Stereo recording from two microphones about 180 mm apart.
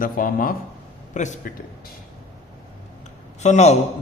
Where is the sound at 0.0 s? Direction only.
50° left (ahead or behind).